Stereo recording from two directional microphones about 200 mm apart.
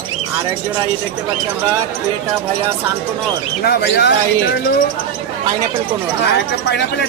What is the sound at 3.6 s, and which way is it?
Speech, 50° left (ahead or behind).